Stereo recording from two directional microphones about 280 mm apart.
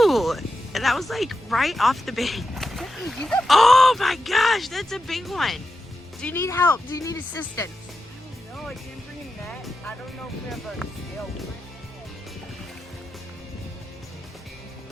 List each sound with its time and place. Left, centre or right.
0.0 s speech: centre
9.5 s music: centre
10.8 s speech: centre